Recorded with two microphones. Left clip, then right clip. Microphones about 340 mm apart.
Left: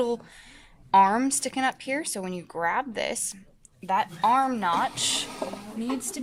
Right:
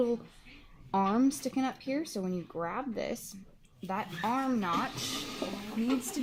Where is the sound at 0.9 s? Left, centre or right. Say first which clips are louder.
Left 9 dB; left.